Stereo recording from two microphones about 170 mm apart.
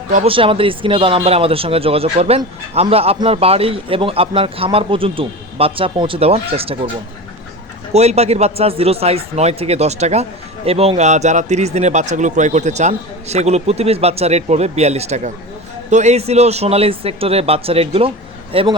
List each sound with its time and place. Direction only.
0.3 s speech: 30° right (ahead or behind)
7.9 s speech: 40° right (ahead or behind)